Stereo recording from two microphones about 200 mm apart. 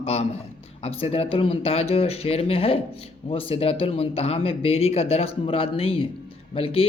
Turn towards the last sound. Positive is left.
turn(degrees=30)  # may be behind; listen again after turning